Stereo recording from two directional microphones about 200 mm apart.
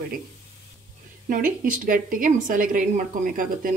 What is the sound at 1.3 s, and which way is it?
Speech, 40° right (ahead or behind).